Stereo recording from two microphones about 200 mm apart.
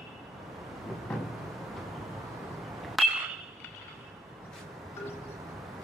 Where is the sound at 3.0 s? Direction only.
Centre (ahead or behind).